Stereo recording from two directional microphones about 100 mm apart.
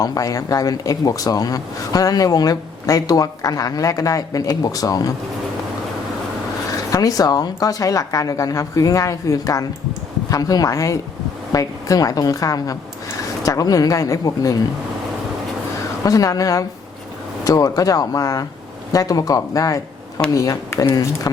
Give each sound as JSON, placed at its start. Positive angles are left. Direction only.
{"t": 0.0, "sound": "speech", "side_deg": 35}
{"t": 6.7, "sound": "speech", "side_deg": 35}
{"t": 16.0, "sound": "speech", "side_deg": 35}